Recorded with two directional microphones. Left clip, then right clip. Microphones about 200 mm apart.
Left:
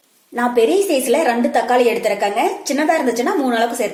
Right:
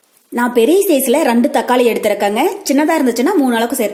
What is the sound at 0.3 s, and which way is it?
A woman's voice, 45° right (ahead or behind).